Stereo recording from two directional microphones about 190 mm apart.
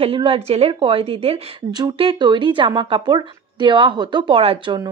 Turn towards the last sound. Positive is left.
turn(degrees=-25)  # may be behind; listen again after turning